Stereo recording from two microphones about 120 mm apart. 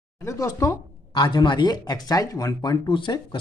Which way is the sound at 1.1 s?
40° left (ahead or behind).